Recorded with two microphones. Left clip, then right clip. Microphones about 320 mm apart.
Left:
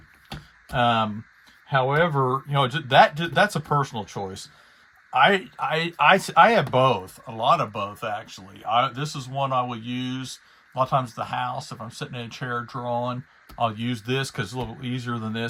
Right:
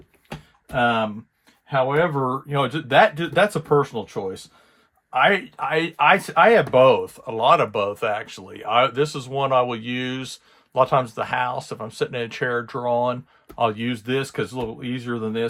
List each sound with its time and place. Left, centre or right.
0.7 s speech: centre